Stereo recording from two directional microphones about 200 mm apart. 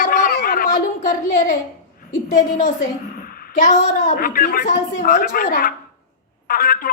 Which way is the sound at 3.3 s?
45° left (ahead or behind).